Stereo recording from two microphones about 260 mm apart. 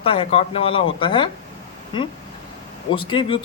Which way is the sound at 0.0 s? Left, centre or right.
Left.